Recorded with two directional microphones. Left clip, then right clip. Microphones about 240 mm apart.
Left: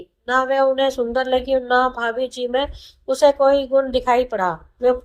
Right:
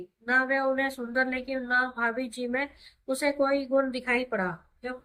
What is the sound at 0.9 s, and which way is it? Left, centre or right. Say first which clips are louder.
Speech: left 10 dB; left.